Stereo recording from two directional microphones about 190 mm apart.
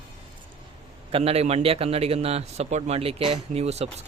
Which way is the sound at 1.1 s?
30° right (ahead or behind).